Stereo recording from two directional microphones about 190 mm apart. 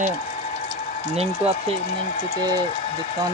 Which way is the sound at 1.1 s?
35° right (ahead or behind).